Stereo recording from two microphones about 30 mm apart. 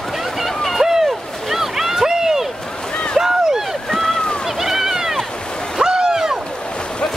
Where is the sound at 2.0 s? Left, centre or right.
Centre.